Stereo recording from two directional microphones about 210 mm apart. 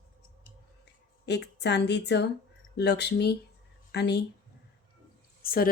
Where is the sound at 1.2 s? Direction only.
55° left (ahead or behind).